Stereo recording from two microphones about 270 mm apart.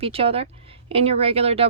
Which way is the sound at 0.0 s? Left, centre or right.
Right.